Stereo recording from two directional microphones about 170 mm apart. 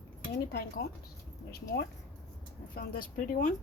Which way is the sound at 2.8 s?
60° left (ahead or behind).